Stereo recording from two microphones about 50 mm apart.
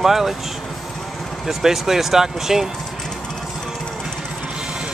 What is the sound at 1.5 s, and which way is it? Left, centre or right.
Speech, centre.